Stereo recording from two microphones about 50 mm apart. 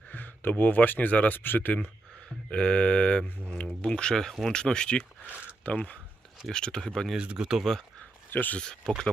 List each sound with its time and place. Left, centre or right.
0.1 s speech: left
2.5 s speech: left
5.2 s a sound: right
5.6 s speech: left
6.5 s speech: centre
7.2 s speech: centre
7.6 s speech: centre
8.3 s speech: left
8.5 s speech: centre